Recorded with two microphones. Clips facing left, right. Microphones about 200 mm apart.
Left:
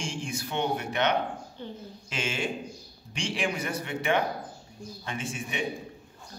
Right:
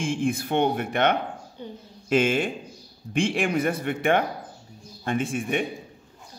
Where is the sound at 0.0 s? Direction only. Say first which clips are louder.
Right 9 dB; 55° right (ahead or behind).